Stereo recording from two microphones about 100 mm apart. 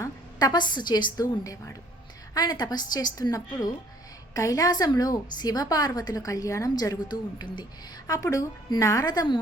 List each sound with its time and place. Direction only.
0.0 s a woman's voice: 40° left (ahead or behind)